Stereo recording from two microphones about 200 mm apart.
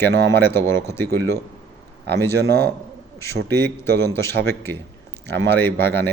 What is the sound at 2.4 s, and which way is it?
Speech, 55° right (ahead or behind).